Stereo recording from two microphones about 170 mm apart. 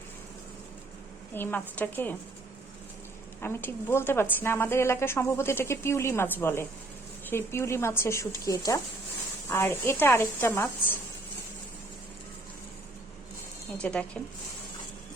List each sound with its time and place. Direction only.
1.3 s a woman's voice: 10° left (ahead or behind)
3.4 s a woman's voice: 15° left (ahead or behind)
13.7 s a woman's voice: 5° left (ahead or behind)